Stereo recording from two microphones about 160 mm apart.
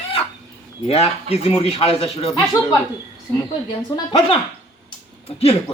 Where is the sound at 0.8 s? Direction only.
40° left (ahead or behind).